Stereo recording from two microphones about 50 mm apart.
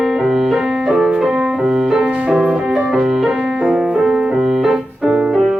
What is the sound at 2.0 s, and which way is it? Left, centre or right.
Music, centre.